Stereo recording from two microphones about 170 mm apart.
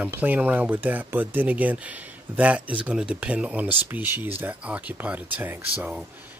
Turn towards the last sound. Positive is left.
turn(degrees=-10)  # may be behind; listen again after turning